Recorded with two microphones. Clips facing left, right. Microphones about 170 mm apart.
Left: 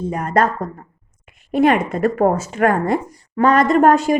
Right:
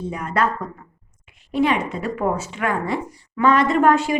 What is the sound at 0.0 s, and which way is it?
Speech, 45° left (ahead or behind).